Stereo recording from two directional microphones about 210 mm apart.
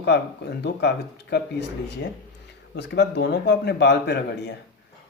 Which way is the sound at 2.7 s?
55° left (ahead or behind).